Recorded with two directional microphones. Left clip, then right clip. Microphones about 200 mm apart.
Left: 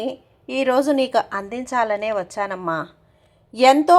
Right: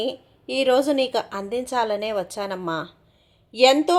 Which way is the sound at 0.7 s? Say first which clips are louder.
Left 2 dB; 10° left (ahead or behind).